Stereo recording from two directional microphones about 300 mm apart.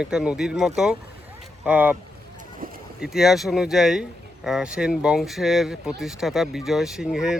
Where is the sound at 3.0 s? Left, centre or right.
Centre.